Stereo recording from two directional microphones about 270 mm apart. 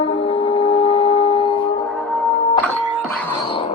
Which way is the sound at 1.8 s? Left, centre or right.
Centre.